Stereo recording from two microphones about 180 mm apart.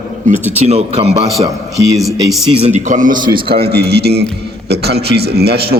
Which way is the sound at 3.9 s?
65° right (ahead or behind).